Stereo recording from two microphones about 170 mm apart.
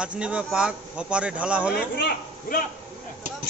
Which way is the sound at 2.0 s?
55° left (ahead or behind).